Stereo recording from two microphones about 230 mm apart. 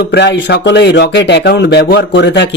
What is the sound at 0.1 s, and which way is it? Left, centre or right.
Speech, left.